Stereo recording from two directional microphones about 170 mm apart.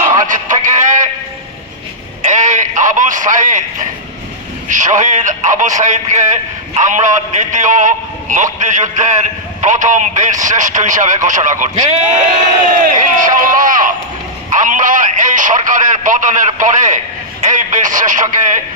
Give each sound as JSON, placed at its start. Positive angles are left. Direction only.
{"t": 0.2, "sound": "music", "side_deg": -50}
{"t": 2.4, "sound": "radio", "side_deg": -50}
{"t": 4.7, "sound": "a man's voice", "side_deg": -45}
{"t": 13.0, "sound": "a sound", "side_deg": -50}
{"t": 14.5, "sound": "a man's voice", "side_deg": -50}